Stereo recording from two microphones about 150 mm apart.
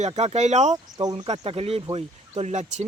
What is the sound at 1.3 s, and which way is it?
Speech, 40° right (ahead or behind).